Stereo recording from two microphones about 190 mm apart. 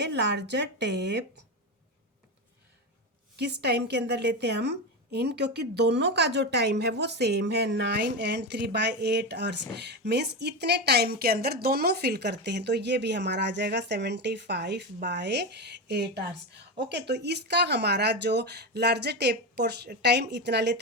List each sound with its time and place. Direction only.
0.0 s a woman's voice: 65° right (ahead or behind)
3.3 s a woman's voice: 60° right (ahead or behind)